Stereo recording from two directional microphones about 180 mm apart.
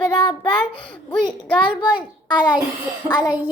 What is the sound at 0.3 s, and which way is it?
A child's voice, 30° left (ahead or behind).